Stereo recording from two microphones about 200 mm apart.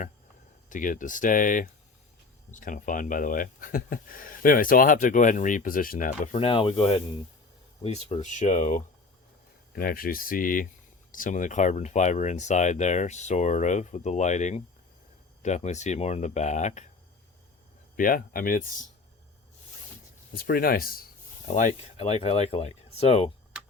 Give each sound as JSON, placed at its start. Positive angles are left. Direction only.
{"t": 0.7, "sound": "speech", "side_deg": 40}
{"t": 17.9, "sound": "speech", "side_deg": 45}
{"t": 20.3, "sound": "speech", "side_deg": 50}